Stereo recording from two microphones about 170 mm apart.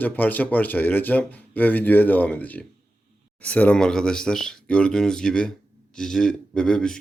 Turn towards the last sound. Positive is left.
turn(degrees=5)  # may be behind; listen again after turning